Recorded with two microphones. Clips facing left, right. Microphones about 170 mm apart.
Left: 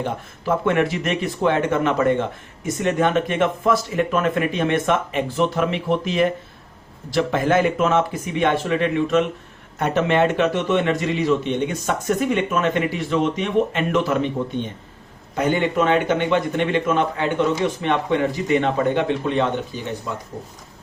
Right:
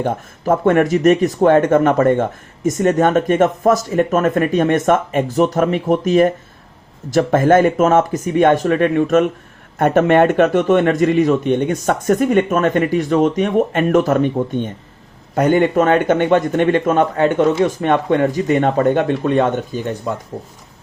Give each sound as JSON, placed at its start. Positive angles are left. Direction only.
{"t": 0.0, "sound": "speech", "side_deg": -45}